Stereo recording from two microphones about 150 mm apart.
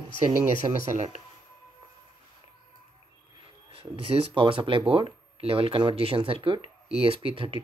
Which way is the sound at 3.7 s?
40° right (ahead or behind).